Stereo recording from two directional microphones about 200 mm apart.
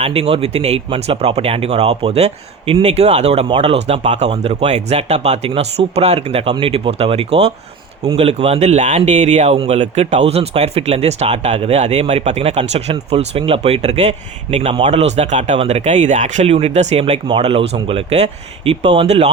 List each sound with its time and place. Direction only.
0.0 s speech: 30° right (ahead or behind)